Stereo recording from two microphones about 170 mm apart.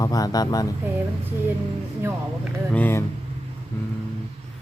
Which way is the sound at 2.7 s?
10° left (ahead or behind).